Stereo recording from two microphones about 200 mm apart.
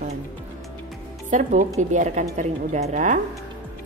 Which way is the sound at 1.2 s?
40° right (ahead or behind).